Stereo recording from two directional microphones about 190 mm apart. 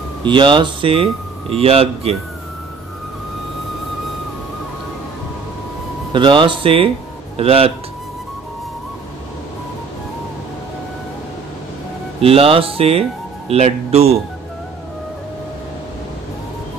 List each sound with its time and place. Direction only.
0.2 s speech: 25° right (ahead or behind)
6.1 s speech: 25° right (ahead or behind)
12.2 s speech: 30° right (ahead or behind)